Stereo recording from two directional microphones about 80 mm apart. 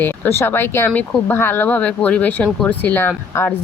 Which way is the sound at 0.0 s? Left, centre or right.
Left.